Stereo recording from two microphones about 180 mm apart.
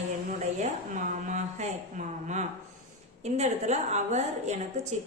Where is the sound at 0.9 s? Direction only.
45° right (ahead or behind).